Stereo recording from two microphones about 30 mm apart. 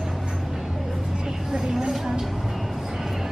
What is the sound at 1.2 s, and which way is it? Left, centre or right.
Vehicle, centre.